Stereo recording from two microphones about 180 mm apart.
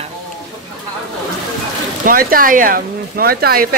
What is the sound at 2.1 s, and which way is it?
Speech, 50° right (ahead or behind).